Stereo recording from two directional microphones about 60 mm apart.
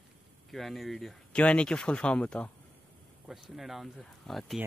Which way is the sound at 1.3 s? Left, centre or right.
Centre.